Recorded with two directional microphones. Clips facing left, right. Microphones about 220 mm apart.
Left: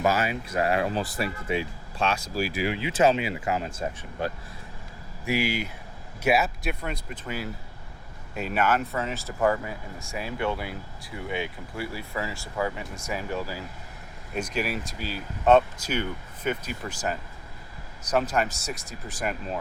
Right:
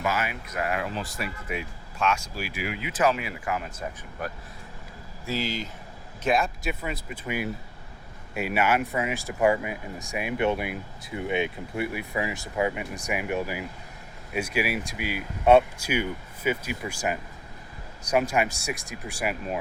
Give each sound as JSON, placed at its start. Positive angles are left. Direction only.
{"t": 0.0, "sound": "speech", "side_deg": 35}
{"t": 5.2, "sound": "speech", "side_deg": 15}
{"t": 8.4, "sound": "speech", "side_deg": -10}